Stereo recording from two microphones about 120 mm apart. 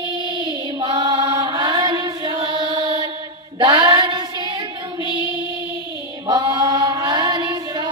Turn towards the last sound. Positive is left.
turn(degrees=-30)  # may be behind; listen again after turning